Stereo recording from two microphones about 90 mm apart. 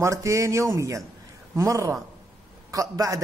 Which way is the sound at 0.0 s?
35° right (ahead or behind).